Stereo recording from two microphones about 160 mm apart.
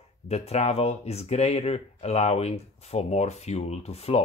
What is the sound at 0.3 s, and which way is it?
Speech, 40° left (ahead or behind).